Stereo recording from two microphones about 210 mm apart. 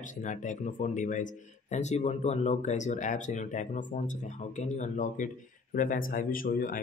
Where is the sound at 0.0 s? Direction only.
35° left (ahead or behind).